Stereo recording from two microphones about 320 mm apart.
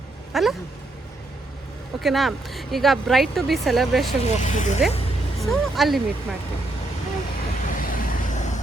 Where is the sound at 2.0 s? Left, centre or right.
Centre.